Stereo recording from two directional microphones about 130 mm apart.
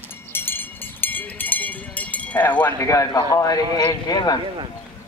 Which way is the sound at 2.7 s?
25° left (ahead or behind).